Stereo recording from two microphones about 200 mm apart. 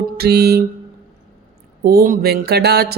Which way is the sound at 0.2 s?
55° right (ahead or behind).